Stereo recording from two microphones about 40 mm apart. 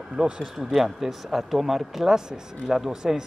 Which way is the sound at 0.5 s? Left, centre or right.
Centre.